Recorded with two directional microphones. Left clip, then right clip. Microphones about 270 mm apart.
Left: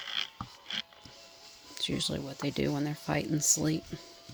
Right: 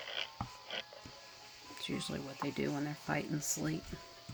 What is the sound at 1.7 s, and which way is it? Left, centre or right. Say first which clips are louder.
Speech: left 8 dB; left.